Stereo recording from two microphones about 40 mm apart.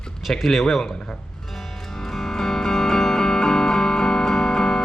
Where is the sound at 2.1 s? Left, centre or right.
Centre.